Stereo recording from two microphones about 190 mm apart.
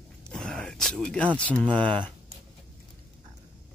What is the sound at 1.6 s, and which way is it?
Speech, 25° right (ahead or behind).